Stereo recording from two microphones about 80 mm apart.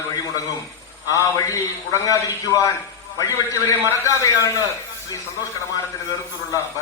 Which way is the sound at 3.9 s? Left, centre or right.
Left.